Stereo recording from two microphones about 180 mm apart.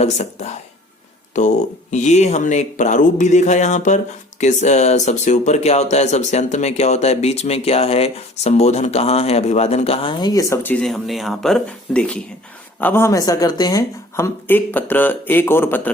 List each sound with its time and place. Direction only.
0.0 s speech: 40° left (ahead or behind); by 15.9 s 10° left (ahead or behind)